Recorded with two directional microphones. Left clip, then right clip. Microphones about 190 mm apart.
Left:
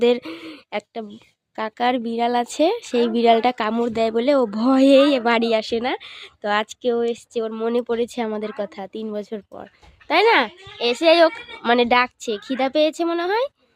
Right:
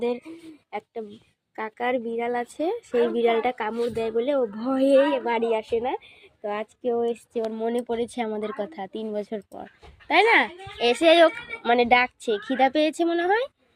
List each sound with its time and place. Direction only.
0.0 s speech: 45° left (ahead or behind)
7.0 s speech: 30° left (ahead or behind)
10.8 s speech: 15° left (ahead or behind)
11.6 s speech: 25° left (ahead or behind)